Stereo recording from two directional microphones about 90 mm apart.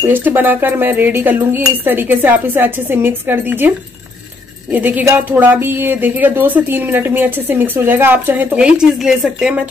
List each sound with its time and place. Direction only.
0.0 s a woman's voice: 25° right (ahead or behind)
4.7 s a woman's voice: 20° right (ahead or behind)